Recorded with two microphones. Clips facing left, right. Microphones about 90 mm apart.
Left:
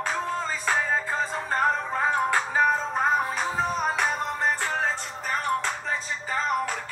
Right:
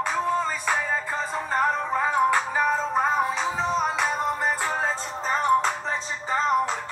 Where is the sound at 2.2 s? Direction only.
5° right (ahead or behind).